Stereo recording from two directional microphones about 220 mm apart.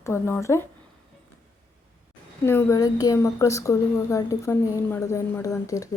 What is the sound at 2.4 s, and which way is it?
A woman's voice, 10° left (ahead or behind).